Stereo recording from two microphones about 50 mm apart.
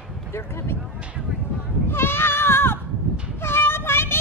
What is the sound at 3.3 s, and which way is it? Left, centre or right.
Child singing, left.